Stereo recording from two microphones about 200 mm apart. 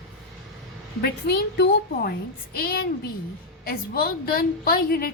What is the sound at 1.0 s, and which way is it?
A woman's voice, 50° left (ahead or behind).